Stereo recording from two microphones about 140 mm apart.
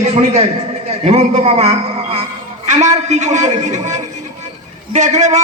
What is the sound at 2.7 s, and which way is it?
A man's voice, 55° right (ahead or behind).